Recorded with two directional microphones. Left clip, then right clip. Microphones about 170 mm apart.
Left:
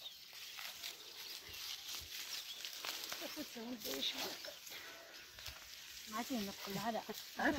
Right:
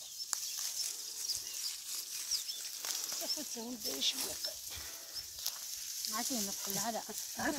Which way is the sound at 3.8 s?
50° right (ahead or behind).